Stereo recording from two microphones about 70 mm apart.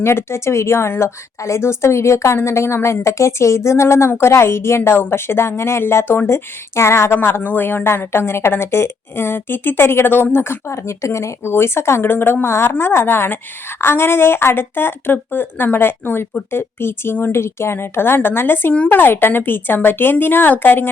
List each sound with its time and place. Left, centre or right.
0.0 s a woman's voice: left